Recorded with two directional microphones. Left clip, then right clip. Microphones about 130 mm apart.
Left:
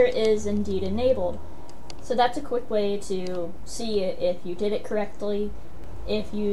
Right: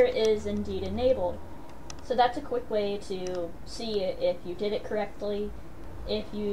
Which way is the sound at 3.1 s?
25° left (ahead or behind).